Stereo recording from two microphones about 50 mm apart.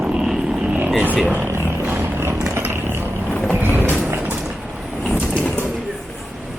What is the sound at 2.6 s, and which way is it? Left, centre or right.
Vehicle, right.